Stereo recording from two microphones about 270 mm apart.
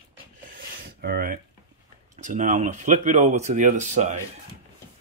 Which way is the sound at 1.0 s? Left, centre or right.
Right.